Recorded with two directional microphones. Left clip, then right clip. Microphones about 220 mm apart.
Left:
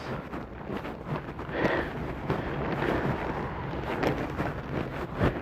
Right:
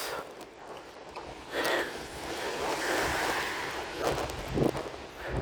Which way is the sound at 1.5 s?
25° right (ahead or behind).